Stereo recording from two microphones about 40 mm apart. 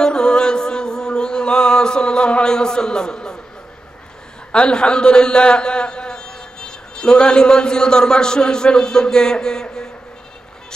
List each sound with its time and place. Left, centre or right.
0.0 s music: centre
4.5 s a man's voice: left